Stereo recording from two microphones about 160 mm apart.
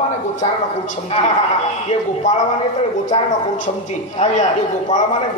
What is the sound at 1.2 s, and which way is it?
Speech, 40° left (ahead or behind).